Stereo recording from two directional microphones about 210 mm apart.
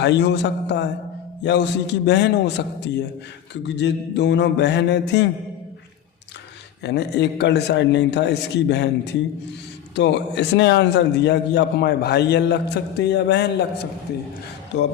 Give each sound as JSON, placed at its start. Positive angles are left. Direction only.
{"t": 0.0, "sound": "a man's voice", "side_deg": 55}
{"t": 1.5, "sound": "a sound", "side_deg": 55}
{"t": 6.8, "sound": "a man's voice", "side_deg": 55}
{"t": 9.9, "sound": "a man's voice", "side_deg": 55}